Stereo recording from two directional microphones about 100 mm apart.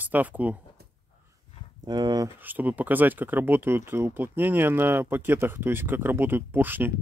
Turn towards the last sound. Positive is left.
turn(degrees=-20)  # may be behind; listen again after turning